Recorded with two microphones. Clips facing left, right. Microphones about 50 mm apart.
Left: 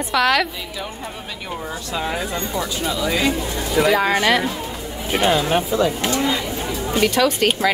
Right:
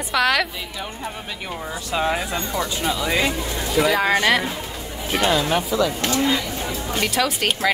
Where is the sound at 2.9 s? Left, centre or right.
Right.